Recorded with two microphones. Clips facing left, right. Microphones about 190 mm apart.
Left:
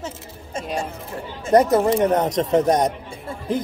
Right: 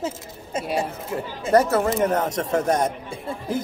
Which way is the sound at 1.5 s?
15° left (ahead or behind).